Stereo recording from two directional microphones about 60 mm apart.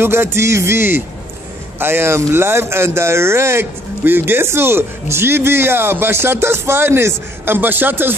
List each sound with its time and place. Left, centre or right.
0.0 s speech: right